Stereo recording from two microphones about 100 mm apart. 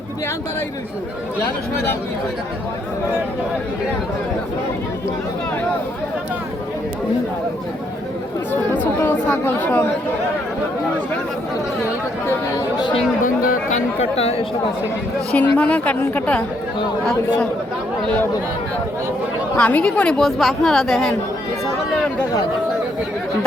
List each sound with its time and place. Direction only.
8.7 s speech: 20° left (ahead or behind)
14.2 s speech: 90° left
15.3 s a woman's voice: 15° left (ahead or behind)
18.0 s a woman's voice: 15° left (ahead or behind)
19.5 s a woman's voice: 15° left (ahead or behind)